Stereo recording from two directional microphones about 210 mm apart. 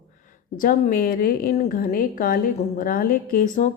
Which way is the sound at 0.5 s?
40° left (ahead or behind).